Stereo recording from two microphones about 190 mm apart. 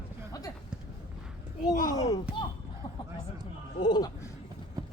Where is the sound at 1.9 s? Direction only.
20° left (ahead or behind).